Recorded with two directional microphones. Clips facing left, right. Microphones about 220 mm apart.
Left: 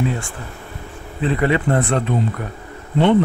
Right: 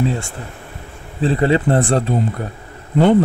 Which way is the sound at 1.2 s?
30° right (ahead or behind).